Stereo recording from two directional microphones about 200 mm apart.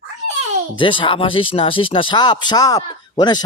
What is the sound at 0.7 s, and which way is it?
Speech, 25° left (ahead or behind).